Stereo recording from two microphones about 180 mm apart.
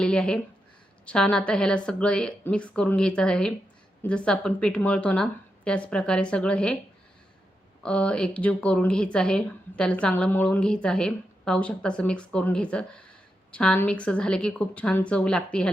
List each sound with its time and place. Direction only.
0.0 s a sound: 5° left (ahead or behind)
1.0 s speech: 5° left (ahead or behind)
7.8 s speech: 5° left (ahead or behind)